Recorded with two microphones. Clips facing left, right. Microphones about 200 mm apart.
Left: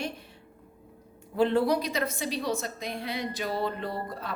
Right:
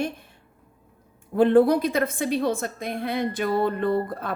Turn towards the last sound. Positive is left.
turn(degrees=-55)  # may be behind; listen again after turning